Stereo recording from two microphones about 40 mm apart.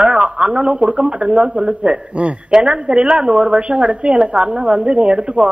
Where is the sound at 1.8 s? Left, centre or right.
Right.